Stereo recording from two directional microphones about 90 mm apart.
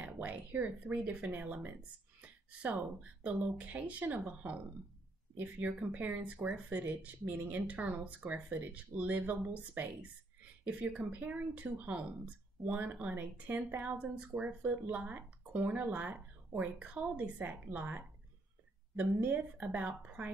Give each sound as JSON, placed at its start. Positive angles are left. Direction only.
{"t": 0.0, "sound": "speech", "side_deg": -20}